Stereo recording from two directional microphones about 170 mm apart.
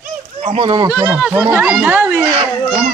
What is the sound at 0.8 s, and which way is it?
Speech, 10° right (ahead or behind).